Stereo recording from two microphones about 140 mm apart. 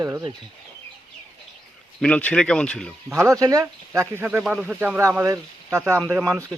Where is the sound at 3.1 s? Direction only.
20° right (ahead or behind).